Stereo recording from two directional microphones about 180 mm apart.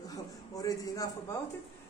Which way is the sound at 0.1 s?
20° left (ahead or behind).